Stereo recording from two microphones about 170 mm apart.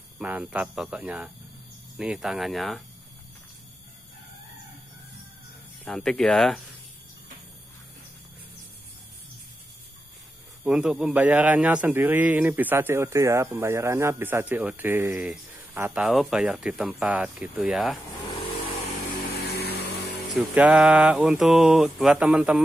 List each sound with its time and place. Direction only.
0.2 s a man's voice: 10° right (ahead or behind)
2.0 s mantra: centre (ahead or behind)
5.9 s mantra: 5° left (ahead or behind)
10.6 s a man's voice: 5° right (ahead or behind)
19.4 s vehicle: 70° left (ahead or behind)
20.5 s mantra: 5° right (ahead or behind)